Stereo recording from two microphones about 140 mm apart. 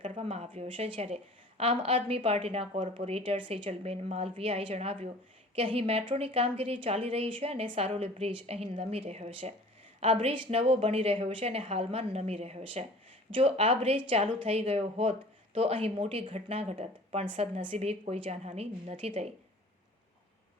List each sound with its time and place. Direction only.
0.0 s a woman's voice: 45° right (ahead or behind)